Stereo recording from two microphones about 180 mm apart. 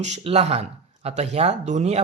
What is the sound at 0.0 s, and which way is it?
Speech, 40° right (ahead or behind).